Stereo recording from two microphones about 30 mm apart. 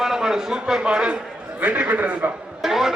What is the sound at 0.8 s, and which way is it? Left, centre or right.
Speech, right.